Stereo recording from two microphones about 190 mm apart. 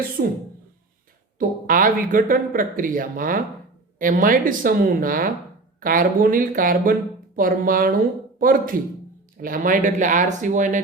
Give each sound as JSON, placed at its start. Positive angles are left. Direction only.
{"t": 0.2, "sound": "speech", "side_deg": -55}
{"t": 1.4, "sound": "speech", "side_deg": -45}